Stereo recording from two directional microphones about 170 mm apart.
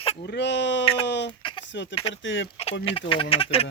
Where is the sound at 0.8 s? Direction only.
35° left (ahead or behind).